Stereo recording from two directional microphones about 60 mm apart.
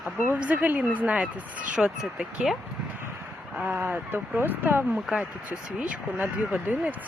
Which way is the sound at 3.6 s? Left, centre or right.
Right.